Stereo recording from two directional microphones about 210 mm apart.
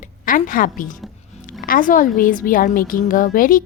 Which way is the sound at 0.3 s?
40° left (ahead or behind).